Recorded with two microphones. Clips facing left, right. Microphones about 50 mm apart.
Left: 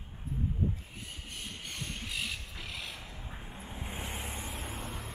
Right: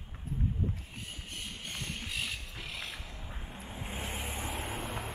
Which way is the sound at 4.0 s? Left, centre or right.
Centre.